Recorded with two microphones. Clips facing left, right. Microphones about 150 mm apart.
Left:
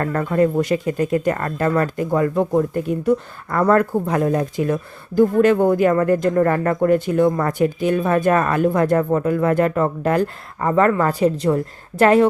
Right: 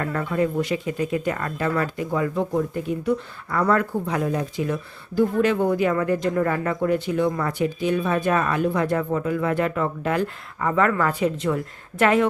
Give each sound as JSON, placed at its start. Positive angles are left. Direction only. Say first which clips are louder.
{"t": 0.0, "sound": "speech", "louder": "left 5 dB", "side_deg": 45}